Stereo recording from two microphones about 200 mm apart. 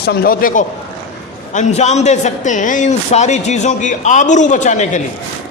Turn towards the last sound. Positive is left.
turn(degrees=40)  # may be behind; listen again after turning